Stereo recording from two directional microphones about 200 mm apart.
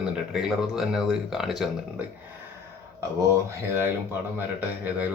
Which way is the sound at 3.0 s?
15° right (ahead or behind).